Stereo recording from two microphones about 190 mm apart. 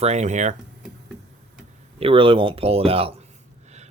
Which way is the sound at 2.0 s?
30° right (ahead or behind).